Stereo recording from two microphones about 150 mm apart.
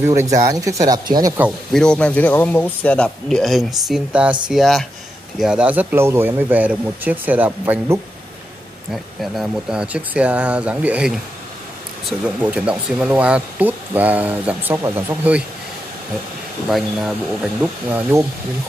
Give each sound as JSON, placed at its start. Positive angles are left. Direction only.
{"t": 0.0, "sound": "speech", "side_deg": -20}
{"t": 1.7, "sound": "speech", "side_deg": 5}
{"t": 8.9, "sound": "speech", "side_deg": 0}
{"t": 16.6, "sound": "speech", "side_deg": 0}